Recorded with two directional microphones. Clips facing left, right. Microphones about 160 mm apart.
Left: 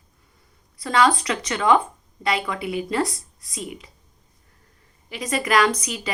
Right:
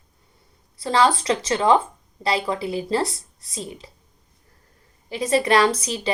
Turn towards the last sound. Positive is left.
turn(degrees=-30)  # may be behind; listen again after turning